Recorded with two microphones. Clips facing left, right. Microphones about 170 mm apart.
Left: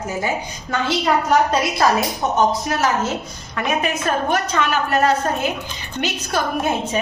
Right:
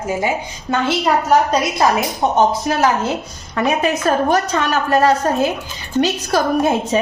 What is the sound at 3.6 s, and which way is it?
A woman's voice, 35° right (ahead or behind).